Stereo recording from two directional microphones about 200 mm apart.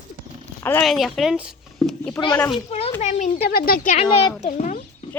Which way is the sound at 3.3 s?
50° left (ahead or behind).